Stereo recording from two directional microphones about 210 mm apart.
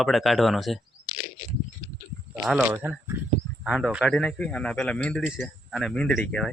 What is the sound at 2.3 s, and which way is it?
Speech, 5° right (ahead or behind).